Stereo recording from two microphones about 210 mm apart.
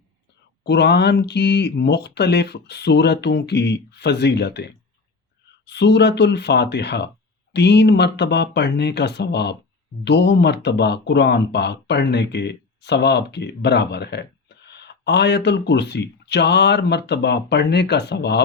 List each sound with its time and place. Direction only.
0.6 s speech: 50° left (ahead or behind)